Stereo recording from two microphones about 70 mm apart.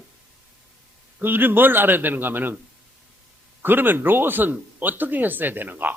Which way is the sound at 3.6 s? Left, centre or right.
Right.